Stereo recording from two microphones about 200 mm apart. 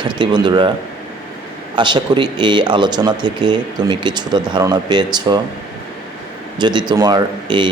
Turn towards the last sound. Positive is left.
turn(degrees=-25)  # may be behind; listen again after turning